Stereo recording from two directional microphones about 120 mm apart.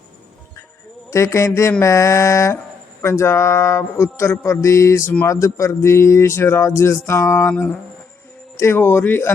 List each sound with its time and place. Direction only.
1.1 s speech: 25° left (ahead or behind)